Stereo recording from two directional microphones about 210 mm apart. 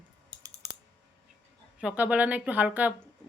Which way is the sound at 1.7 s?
5° right (ahead or behind).